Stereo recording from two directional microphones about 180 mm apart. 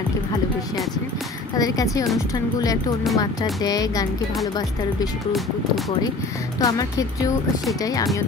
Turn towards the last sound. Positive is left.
turn(degrees=20)  # may be behind; listen again after turning